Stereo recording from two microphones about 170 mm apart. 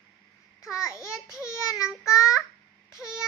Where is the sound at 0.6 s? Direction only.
15° left (ahead or behind).